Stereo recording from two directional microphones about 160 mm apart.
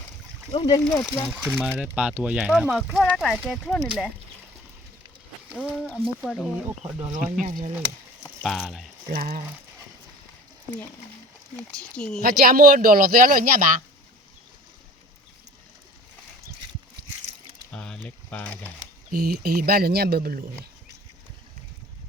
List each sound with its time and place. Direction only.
0.5 s speech: 25° left (ahead or behind)
1.3 s speech: 5° right (ahead or behind)
5.5 s speech: 5° right (ahead or behind)
7.4 s speech: 45° right (ahead or behind)
8.4 s speech: centre (ahead or behind)
9.0 s speech: 65° right (ahead or behind)
11.5 s speech: 5° left (ahead or behind)
12.2 s speech: 65° right (ahead or behind)
17.7 s a sound: 5° left (ahead or behind)
19.1 s speech: 70° right (ahead or behind)